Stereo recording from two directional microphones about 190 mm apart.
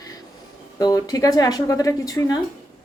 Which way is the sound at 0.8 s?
20° left (ahead or behind).